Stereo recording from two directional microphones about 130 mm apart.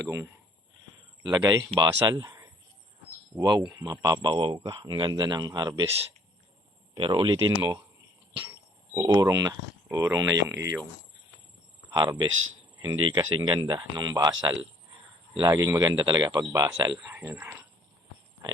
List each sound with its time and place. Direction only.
1.2 s speech: 30° right (ahead or behind)
6.9 s speech: 40° right (ahead or behind)
9.0 s speech: 25° right (ahead or behind)
11.9 s speech: 35° right (ahead or behind)
17.1 s speech: 15° right (ahead or behind)